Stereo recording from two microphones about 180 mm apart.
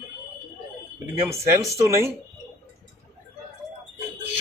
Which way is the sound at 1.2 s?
15° right (ahead or behind).